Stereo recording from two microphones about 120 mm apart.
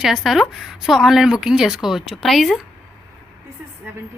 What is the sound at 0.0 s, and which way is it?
Speech, 5° right (ahead or behind).